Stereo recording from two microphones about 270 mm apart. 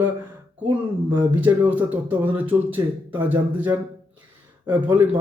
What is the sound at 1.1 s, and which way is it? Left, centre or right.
Speech, centre.